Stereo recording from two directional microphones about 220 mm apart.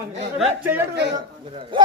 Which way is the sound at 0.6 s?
10° right (ahead or behind).